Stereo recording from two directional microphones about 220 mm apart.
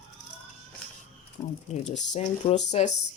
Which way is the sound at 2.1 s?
30° left (ahead or behind).